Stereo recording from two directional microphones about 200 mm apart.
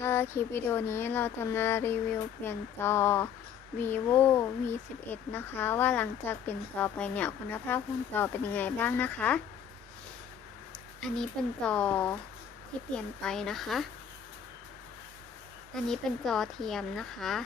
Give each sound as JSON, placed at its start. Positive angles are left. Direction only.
{"t": 0.0, "sound": "speech", "side_deg": 10}
{"t": 10.7, "sound": "speech", "side_deg": 5}
{"t": 15.7, "sound": "speech", "side_deg": 0}